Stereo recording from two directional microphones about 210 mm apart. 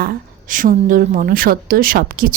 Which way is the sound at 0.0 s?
45° right (ahead or behind).